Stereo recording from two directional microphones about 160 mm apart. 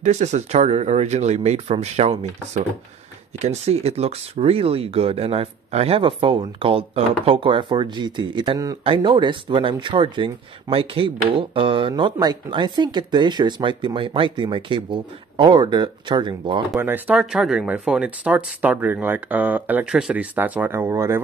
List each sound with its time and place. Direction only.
0.0 s speech: 45° right (ahead or behind); by 16.6 s 30° right (ahead or behind)
16.8 s speech: 10° right (ahead or behind)